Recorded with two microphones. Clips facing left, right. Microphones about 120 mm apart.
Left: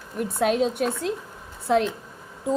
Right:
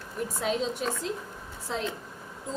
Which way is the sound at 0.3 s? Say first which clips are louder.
Left 8 dB; 60° left (ahead or behind).